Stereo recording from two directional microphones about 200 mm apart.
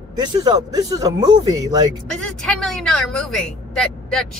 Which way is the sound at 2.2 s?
5° left (ahead or behind).